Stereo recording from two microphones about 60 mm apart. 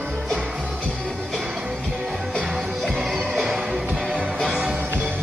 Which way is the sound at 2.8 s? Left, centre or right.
Centre.